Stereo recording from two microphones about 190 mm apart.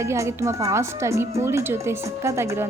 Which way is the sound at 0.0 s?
15° right (ahead or behind).